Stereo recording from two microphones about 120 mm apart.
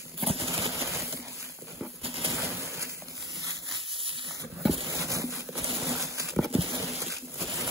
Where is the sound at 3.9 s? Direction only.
45° right (ahead or behind).